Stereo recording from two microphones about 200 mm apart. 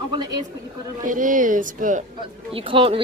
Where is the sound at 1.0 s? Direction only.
40° right (ahead or behind).